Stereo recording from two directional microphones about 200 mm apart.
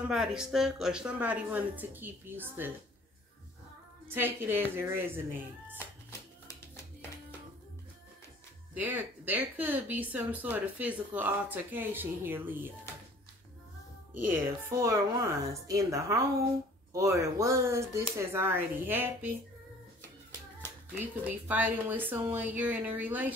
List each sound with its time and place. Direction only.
0.1 s speech: 5° right (ahead or behind)
4.1 s speech: 10° right (ahead or behind)
5.8 s music: 15° left (ahead or behind)
8.7 s speech: 10° right (ahead or behind)
14.3 s speech: 15° right (ahead or behind)
20.9 s speech: 10° right (ahead or behind)